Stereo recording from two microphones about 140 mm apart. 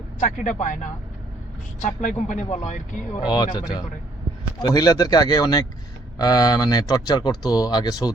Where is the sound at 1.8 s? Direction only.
55° left (ahead or behind).